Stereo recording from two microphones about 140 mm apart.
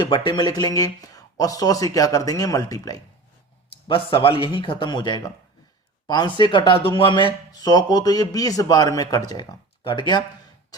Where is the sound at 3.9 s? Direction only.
40° left (ahead or behind).